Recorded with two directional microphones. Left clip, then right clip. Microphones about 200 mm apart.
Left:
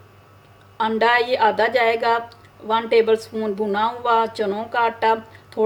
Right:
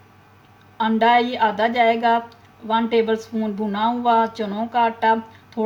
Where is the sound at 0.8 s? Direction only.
55° left (ahead or behind).